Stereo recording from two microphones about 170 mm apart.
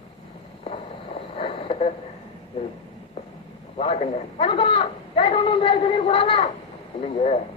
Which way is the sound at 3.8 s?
35° left (ahead or behind).